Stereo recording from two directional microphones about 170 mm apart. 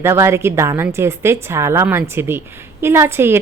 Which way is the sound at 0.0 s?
15° right (ahead or behind).